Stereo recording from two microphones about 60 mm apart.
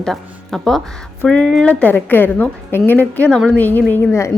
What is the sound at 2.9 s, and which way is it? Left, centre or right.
Speech, left.